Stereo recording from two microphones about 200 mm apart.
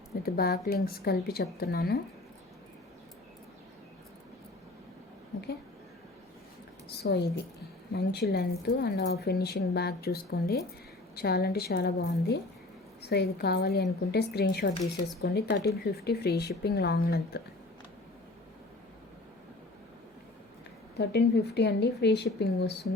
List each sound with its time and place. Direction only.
0.2 s a woman's voice: 50° left (ahead or behind)
6.8 s a woman's voice: 55° left (ahead or behind)
21.0 s speech: 55° left (ahead or behind)